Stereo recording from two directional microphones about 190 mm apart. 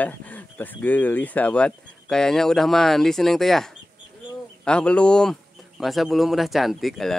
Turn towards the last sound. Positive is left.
turn(degrees=0)  # may be behind; listen again after turning